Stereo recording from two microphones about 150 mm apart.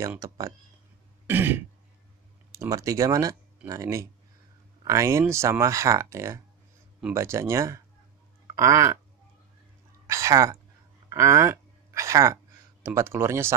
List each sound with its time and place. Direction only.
1.2 s throat clearing: 15° right (ahead or behind)
2.5 s speech: 20° right (ahead or behind)
10.0 s speech: 20° right (ahead or behind)